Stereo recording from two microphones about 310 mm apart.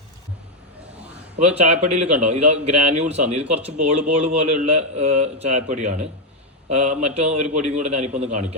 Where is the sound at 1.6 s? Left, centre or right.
Right.